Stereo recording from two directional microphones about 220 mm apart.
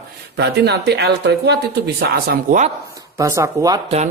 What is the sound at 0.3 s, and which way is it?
A woman's voice, 50° right (ahead or behind).